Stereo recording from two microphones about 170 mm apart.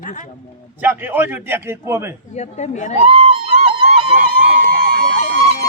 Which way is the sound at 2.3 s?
40° left (ahead or behind).